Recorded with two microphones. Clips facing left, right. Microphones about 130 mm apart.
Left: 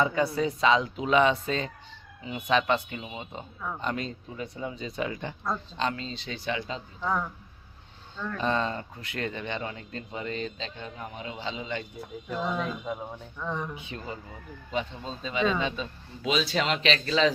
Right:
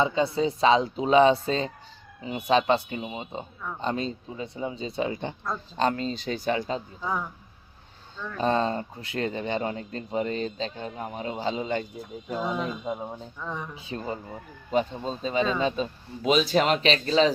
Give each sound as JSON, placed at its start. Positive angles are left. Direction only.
{"t": 0.0, "sound": "speech", "side_deg": -25}
{"t": 5.7, "sound": "speech", "side_deg": -45}
{"t": 7.0, "sound": "speech", "side_deg": -5}
{"t": 8.4, "sound": "speech", "side_deg": -35}
{"t": 12.3, "sound": "speech", "side_deg": -10}
{"t": 12.8, "sound": "speech", "side_deg": -25}
{"t": 13.4, "sound": "speech", "side_deg": 0}
{"t": 13.7, "sound": "speech", "side_deg": -35}